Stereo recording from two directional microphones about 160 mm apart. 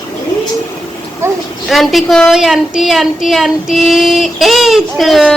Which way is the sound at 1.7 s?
Centre (ahead or behind).